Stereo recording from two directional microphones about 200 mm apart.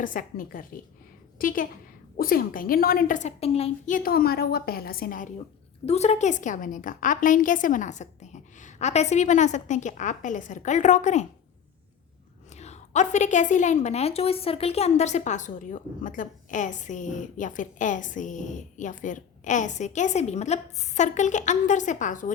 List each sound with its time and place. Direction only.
0.0 s a woman's voice: 40° left (ahead or behind)
5.8 s a woman's voice: 30° left (ahead or behind)
12.5 s a woman's voice: 35° left (ahead or behind)